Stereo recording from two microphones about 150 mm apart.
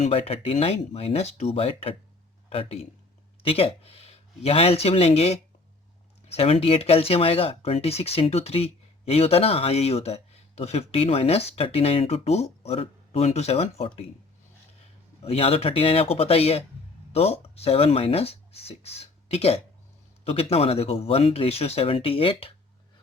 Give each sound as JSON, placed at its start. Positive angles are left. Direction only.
{"t": 0.0, "sound": "speech", "side_deg": 40}
{"t": 15.2, "sound": "speech", "side_deg": 40}